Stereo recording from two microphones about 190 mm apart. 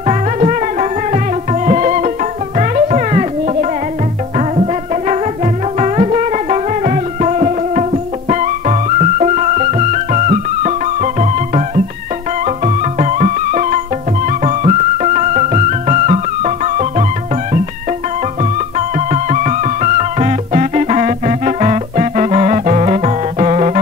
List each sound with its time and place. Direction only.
0.0 s music: 35° right (ahead or behind)
4.4 s music: 35° right (ahead or behind)
18.4 s music: 40° right (ahead or behind)